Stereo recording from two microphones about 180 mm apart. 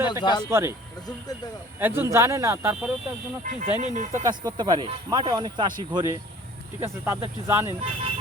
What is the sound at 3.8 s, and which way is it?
Speech, 45° right (ahead or behind).